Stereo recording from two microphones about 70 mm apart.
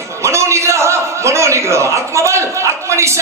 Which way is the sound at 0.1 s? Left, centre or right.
Right.